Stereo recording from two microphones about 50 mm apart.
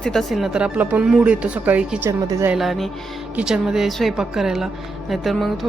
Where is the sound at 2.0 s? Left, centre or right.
Right.